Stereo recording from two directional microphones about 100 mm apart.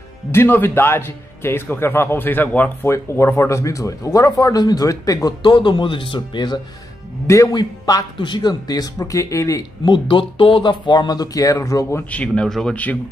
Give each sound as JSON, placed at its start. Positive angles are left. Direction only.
{"t": 0.3, "sound": "a man's voice", "side_deg": 20}
{"t": 2.9, "sound": "speech", "side_deg": 30}
{"t": 5.4, "sound": "speech", "side_deg": 50}
{"t": 7.2, "sound": "speech", "side_deg": 35}
{"t": 9.8, "sound": "speech", "side_deg": 55}
{"t": 12.1, "sound": "speech", "side_deg": 10}